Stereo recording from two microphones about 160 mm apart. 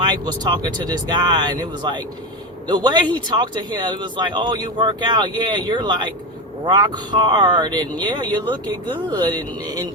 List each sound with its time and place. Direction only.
0.0 s speech: 25° right (ahead or behind)